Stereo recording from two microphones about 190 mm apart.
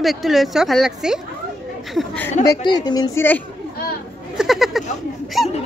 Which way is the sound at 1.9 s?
10° left (ahead or behind).